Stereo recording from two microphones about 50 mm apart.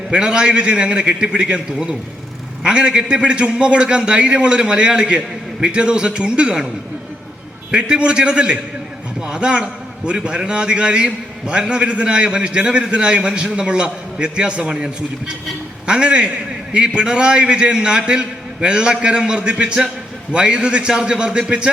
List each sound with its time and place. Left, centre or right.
0.1 s a man's voice: centre
7.7 s a man's voice: centre